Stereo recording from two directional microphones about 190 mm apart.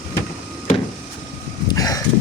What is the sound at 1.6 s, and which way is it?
Vehicle, 20° left (ahead or behind).